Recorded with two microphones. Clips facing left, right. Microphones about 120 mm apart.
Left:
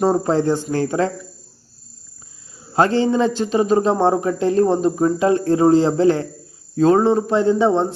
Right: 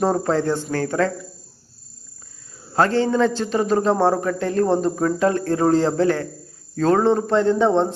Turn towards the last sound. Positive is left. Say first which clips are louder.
# left 1 dB
turn(degrees=10)  # may be behind; listen again after turning